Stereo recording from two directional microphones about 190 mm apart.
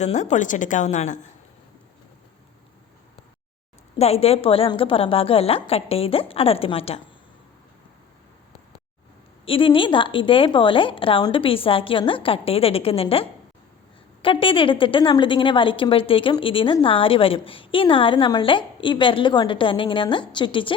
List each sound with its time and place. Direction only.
0.0 s a woman's voice: 35° left (ahead or behind)
3.9 s a woman's voice: 30° left (ahead or behind)
9.5 s a woman's voice: 25° left (ahead or behind)